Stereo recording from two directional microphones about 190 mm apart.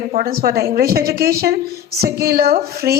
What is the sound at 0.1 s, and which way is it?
A woman's voice, 50° right (ahead or behind).